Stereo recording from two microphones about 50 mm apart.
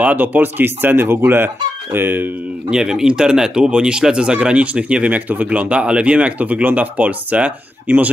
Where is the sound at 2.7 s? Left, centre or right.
Centre.